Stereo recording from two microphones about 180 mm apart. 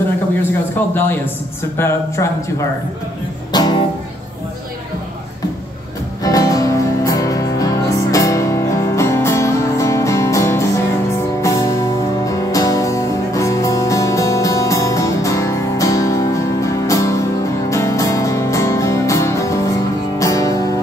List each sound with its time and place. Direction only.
0.9 s speech: 10° left (ahead or behind)
3.5 s music: 25° left (ahead or behind)
6.2 s music: 20° left (ahead or behind)